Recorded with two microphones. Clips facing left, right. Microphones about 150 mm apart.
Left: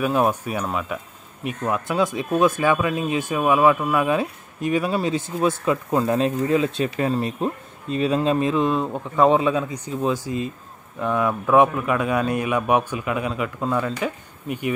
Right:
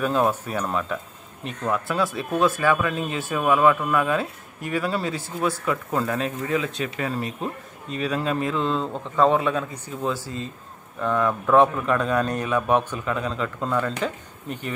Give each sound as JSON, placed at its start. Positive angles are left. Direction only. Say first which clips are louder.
{"t": 0.0, "sound": "a man's voice", "louder": "left 2 dB", "side_deg": 15}